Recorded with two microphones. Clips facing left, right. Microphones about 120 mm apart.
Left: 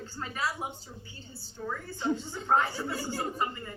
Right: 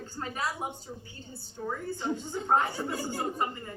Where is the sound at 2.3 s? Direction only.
45° right (ahead or behind).